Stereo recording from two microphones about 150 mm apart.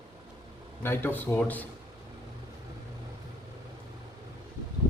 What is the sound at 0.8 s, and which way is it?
Speech, 15° left (ahead or behind).